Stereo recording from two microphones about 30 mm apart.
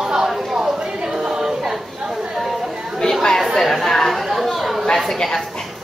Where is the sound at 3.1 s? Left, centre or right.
Centre.